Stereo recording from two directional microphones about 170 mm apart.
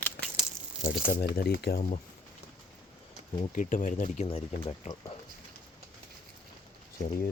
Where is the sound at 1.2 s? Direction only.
70° left (ahead or behind).